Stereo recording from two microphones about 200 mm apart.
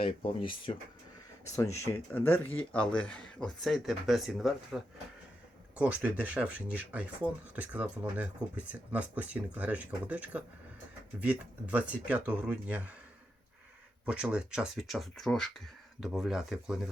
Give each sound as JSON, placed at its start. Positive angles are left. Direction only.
{"t": 0.0, "sound": "speech", "side_deg": 25}
{"t": 1.5, "sound": "speech", "side_deg": 15}
{"t": 14.0, "sound": "speech", "side_deg": -5}